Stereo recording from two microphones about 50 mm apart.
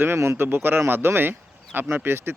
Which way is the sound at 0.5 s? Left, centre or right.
Right.